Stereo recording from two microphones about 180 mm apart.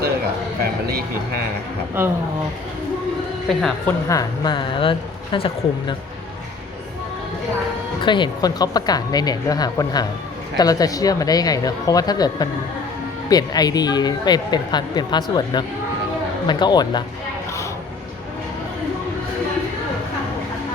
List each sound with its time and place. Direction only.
2.0 s speech: 10° right (ahead or behind)
3.5 s a woman's voice: centre (ahead or behind)
4.1 s speech: 25° left (ahead or behind)
8.0 s speech: 25° left (ahead or behind)